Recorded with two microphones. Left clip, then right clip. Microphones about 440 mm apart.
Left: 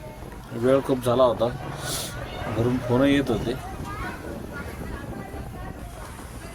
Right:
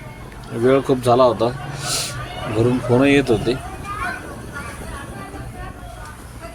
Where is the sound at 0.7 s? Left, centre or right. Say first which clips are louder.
Right 6 dB; left.